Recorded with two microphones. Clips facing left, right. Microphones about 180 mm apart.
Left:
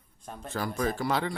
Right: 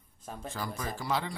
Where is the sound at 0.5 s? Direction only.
60° left (ahead or behind).